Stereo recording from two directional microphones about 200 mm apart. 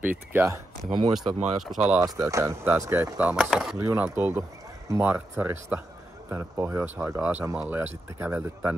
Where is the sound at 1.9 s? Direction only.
15° right (ahead or behind).